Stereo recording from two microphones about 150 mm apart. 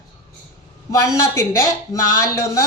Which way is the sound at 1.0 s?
20° left (ahead or behind).